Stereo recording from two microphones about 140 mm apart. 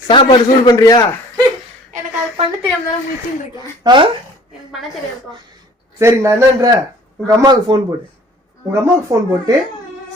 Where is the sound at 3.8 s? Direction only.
35° right (ahead or behind).